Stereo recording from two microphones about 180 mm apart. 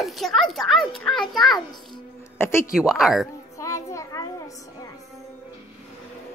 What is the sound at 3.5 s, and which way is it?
Child singing, 15° left (ahead or behind).